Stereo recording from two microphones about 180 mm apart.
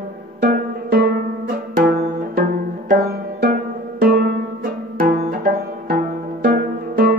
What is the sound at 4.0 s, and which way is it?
Music, 55° right (ahead or behind).